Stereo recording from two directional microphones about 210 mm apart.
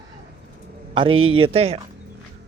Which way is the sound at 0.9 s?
25° right (ahead or behind).